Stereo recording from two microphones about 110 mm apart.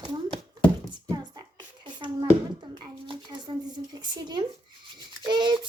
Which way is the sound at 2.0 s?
45° right (ahead or behind).